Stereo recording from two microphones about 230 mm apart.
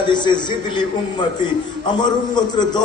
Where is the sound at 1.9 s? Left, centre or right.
Centre.